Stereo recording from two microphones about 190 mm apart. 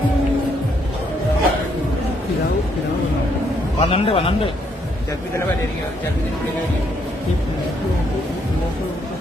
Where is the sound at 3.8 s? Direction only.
30° left (ahead or behind).